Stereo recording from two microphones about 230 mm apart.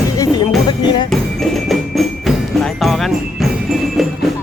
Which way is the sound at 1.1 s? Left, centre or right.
Centre.